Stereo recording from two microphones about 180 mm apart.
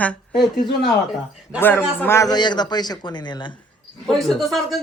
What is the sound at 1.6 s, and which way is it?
A man's voice, 10° left (ahead or behind).